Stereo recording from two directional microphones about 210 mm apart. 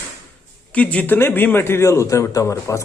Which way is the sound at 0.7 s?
5° left (ahead or behind).